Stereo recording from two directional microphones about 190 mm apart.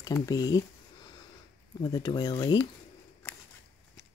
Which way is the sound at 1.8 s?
20° left (ahead or behind).